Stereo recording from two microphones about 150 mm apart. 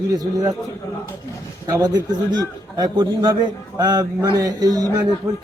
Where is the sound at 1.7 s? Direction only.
25° right (ahead or behind).